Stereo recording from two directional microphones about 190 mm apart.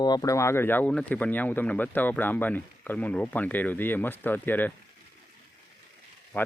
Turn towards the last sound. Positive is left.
turn(degrees=10)  # may be behind; listen again after turning